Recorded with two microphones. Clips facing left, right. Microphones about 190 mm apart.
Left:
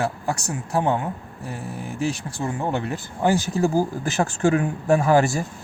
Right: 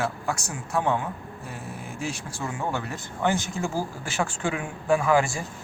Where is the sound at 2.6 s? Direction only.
20° left (ahead or behind); by 5.4 s 40° left (ahead or behind).